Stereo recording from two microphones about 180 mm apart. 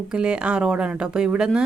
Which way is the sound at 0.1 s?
5° right (ahead or behind).